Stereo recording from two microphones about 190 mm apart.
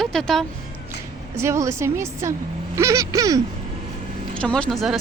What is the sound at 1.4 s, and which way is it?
Speech, 15° right (ahead or behind).